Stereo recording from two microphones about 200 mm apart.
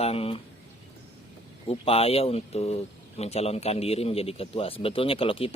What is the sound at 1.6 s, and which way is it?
Speech, 30° left (ahead or behind).